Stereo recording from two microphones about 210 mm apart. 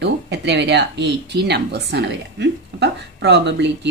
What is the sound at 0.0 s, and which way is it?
Speech, 55° right (ahead or behind).